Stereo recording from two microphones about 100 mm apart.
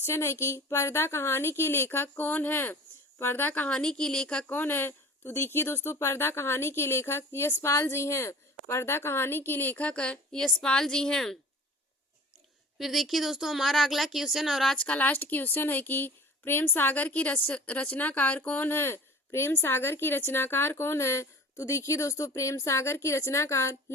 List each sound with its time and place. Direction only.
0.0 s a woman's voice: 25° left (ahead or behind); by 11.3 s 5° left (ahead or behind)
12.8 s speech: centre (ahead or behind)
14.8 s a woman's voice: 15° left (ahead or behind)